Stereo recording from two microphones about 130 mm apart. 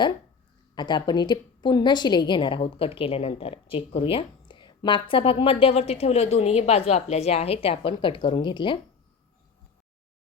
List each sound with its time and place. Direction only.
0.8 s a woman's voice: 35° left (ahead or behind)